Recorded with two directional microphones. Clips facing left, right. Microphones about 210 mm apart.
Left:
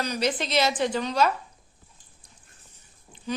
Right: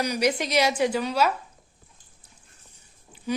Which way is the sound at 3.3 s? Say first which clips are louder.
Right 3 dB; 10° right (ahead or behind).